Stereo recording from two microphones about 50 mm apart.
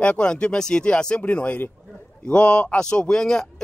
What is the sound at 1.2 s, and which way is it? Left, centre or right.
A man's voice, left.